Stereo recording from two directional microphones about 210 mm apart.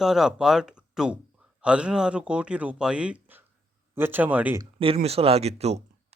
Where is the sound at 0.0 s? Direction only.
Centre (ahead or behind).